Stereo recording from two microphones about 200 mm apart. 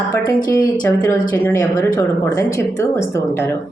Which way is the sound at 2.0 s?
10° left (ahead or behind).